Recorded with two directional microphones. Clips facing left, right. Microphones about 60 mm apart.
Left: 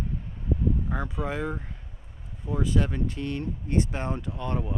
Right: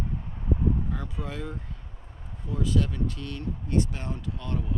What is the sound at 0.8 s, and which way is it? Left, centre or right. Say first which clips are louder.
Speech: left 4 dB; left.